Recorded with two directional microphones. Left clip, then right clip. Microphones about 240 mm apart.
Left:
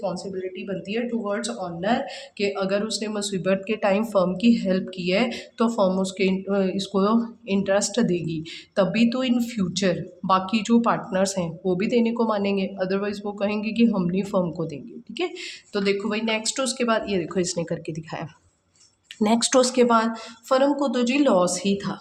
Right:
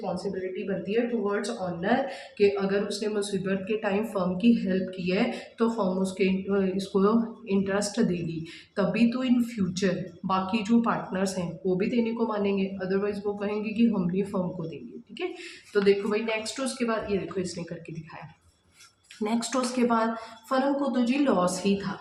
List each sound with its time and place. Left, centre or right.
0.1 s speech: left
19.2 s speech: left